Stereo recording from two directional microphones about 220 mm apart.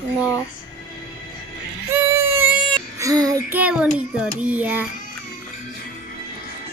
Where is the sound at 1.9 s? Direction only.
10° right (ahead or behind).